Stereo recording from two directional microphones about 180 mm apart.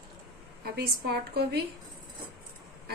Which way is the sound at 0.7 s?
60° right (ahead or behind).